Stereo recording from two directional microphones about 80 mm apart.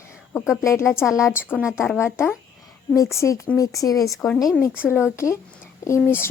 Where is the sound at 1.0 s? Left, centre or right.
Centre.